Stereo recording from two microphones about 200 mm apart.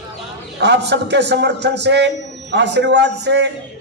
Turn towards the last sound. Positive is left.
turn(degrees=-60)  # may be behind; listen again after turning